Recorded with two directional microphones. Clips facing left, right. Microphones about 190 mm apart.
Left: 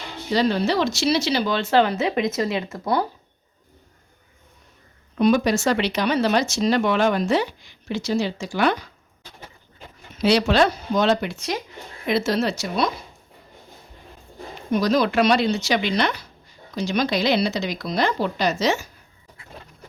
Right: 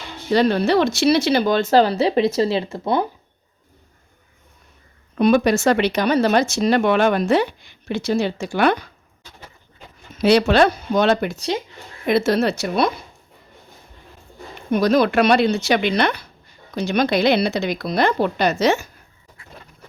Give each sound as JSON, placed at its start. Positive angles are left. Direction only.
{"t": 0.3, "sound": "speech", "side_deg": -60}
{"t": 5.1, "sound": "speech", "side_deg": -60}
{"t": 10.2, "sound": "speech", "side_deg": -55}
{"t": 11.3, "sound": "speech", "side_deg": -30}
{"t": 12.0, "sound": "speech", "side_deg": -55}
{"t": 14.7, "sound": "speech", "side_deg": -60}